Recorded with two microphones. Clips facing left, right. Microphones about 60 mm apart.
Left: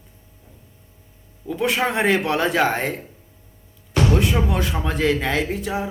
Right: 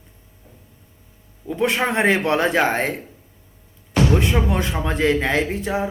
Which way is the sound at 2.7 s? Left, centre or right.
Right.